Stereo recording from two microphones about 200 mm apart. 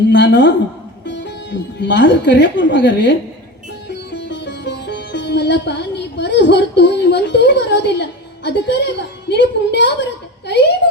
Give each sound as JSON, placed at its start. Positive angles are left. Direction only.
{"t": 0.1, "sound": "a woman's voice", "side_deg": 60}
{"t": 3.8, "sound": "music", "side_deg": 60}
{"t": 8.4, "sound": "a woman's voice", "side_deg": 60}